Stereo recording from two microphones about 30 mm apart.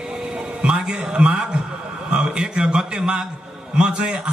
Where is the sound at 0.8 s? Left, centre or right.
Right.